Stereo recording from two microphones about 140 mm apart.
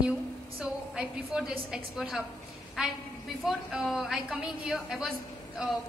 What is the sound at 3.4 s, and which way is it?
A woman's voice, centre (ahead or behind).